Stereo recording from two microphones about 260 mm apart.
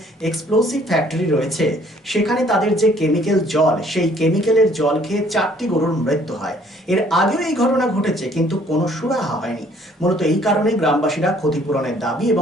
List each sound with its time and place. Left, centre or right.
0.2 s speech: centre